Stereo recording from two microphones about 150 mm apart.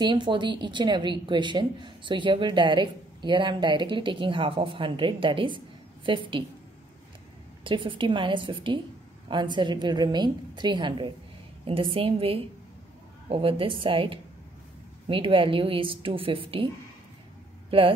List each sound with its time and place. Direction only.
0.0 s a woman's voice: 30° right (ahead or behind)
7.6 s a woman's voice: 35° right (ahead or behind)
17.6 s speech: 35° right (ahead or behind)